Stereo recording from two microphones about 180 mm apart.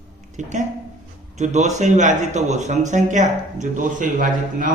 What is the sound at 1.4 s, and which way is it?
Speech, 40° right (ahead or behind).